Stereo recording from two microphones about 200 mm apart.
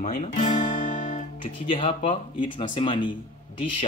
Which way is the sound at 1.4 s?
25° left (ahead or behind).